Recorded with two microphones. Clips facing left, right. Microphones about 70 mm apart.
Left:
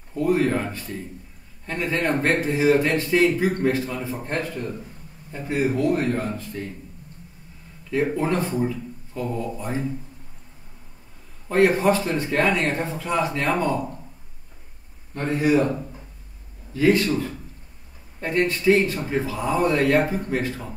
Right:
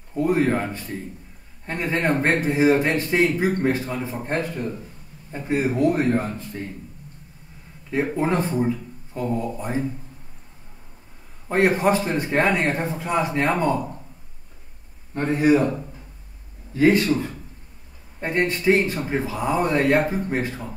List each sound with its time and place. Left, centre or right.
0.1 s speech: right
8.2 s speech: right
11.4 s speech: right
15.1 s speech: right
16.7 s speech: right
18.2 s speech: right